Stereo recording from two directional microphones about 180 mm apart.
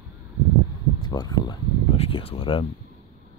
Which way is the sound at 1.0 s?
20° left (ahead or behind).